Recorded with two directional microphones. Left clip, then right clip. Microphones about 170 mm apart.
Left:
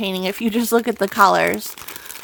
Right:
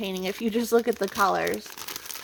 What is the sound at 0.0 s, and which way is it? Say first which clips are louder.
Speech: left 7 dB; 30° left (ahead or behind).